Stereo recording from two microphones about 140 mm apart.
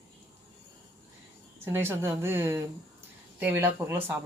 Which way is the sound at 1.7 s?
15° right (ahead or behind).